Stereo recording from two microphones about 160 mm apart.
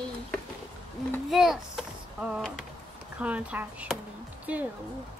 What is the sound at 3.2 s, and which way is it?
Speech, 10° right (ahead or behind).